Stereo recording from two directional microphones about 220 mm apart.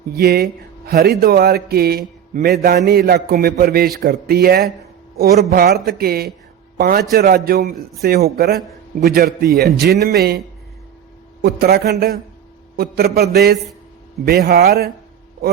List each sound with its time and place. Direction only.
0.2 s a man's voice: 45° right (ahead or behind)
11.4 s speech: 45° right (ahead or behind)